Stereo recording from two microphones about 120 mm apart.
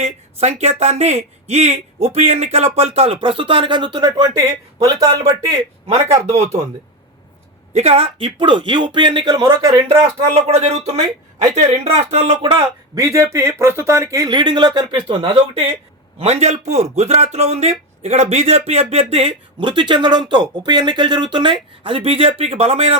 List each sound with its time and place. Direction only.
0.0 s speech: 60° right (ahead or behind); by 5.3 s 30° right (ahead or behind)
6.2 s a man's voice: 65° right (ahead or behind)
7.7 s speech: 60° right (ahead or behind); by 10.1 s 30° right (ahead or behind)
10.2 s a man's voice: 60° right (ahead or behind)
12.5 s speech: 35° right (ahead or behind)
14.3 s speech: 40° right (ahead or behind)
16.1 s a man's voice: 65° right (ahead or behind)
19.5 s speech: 40° right (ahead or behind); by 23.0 s 60° right (ahead or behind)